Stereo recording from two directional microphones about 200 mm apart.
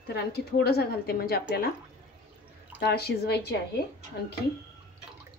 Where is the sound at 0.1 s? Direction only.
55° left (ahead or behind).